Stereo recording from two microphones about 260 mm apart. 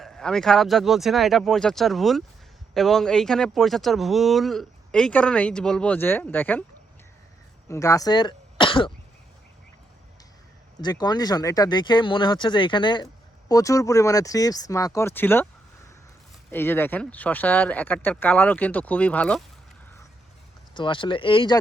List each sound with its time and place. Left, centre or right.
0.0 s speech: centre
7.7 s speech: centre
10.8 s speech: centre
16.5 s speech: centre
20.7 s speech: centre